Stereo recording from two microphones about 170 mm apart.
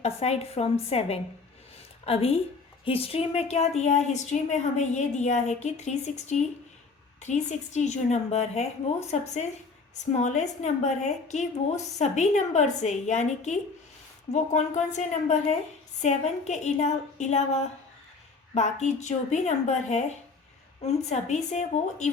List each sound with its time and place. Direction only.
0.0 s a woman's voice: 40° left (ahead or behind)